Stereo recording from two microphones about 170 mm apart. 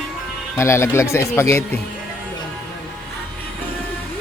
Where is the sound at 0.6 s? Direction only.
15° left (ahead or behind).